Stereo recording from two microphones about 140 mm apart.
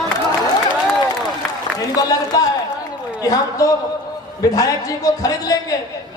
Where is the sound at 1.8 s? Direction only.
25° left (ahead or behind).